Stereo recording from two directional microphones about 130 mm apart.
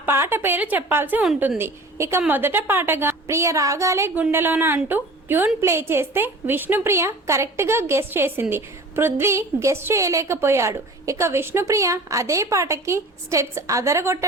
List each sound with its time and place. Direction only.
0.0 s a woman's voice: 15° right (ahead or behind)